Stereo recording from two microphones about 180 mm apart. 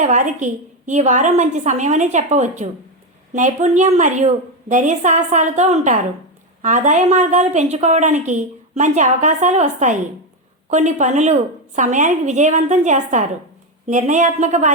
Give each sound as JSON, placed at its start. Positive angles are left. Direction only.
{"t": 0.0, "sound": "a woman's voice", "side_deg": -40}